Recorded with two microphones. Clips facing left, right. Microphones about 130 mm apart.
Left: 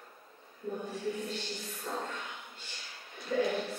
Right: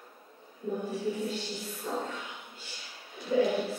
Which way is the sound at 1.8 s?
5° right (ahead or behind).